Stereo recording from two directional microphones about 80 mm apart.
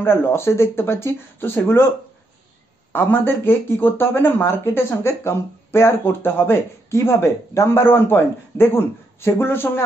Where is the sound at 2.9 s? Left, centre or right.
Left.